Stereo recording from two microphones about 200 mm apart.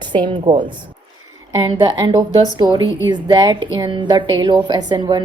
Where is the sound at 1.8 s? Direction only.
20° right (ahead or behind).